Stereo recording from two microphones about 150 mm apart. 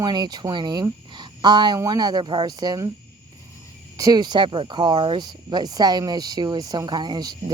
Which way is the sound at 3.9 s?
25° right (ahead or behind).